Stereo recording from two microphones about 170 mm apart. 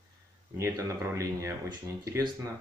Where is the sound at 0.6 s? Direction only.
20° right (ahead or behind).